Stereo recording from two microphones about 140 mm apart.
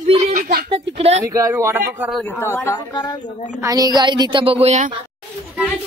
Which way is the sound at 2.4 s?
15° left (ahead or behind).